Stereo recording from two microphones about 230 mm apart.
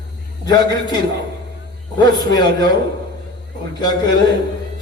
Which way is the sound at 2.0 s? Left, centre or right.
Centre.